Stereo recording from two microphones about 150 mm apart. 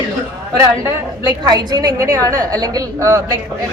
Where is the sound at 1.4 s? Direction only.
25° right (ahead or behind).